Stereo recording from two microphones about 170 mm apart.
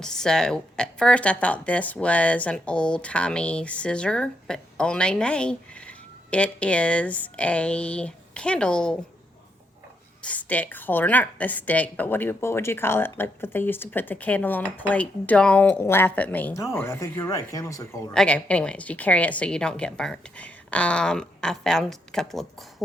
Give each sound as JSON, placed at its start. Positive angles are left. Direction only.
{"t": 0.0, "sound": "speech", "side_deg": 5}
{"t": 10.2, "sound": "speech", "side_deg": 10}
{"t": 18.1, "sound": "a woman's voice", "side_deg": 5}